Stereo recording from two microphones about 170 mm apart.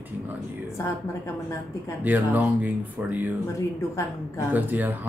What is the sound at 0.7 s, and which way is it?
Speech, 15° left (ahead or behind).